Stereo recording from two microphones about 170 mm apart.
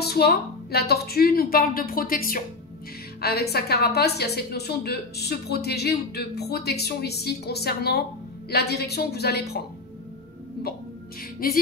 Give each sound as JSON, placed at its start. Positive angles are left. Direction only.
{"t": 0.0, "sound": "a woman's voice", "side_deg": 70}
{"t": 11.3, "sound": "a woman's voice", "side_deg": 60}